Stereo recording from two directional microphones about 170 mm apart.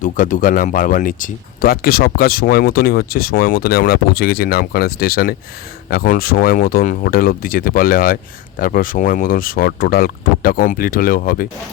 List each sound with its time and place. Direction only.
0.0 s speech: 50° left (ahead or behind)